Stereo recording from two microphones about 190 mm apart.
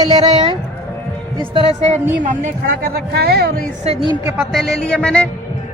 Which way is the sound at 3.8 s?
30° right (ahead or behind).